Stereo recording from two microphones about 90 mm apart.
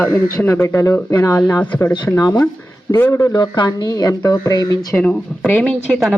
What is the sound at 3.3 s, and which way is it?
Speech, 55° left (ahead or behind).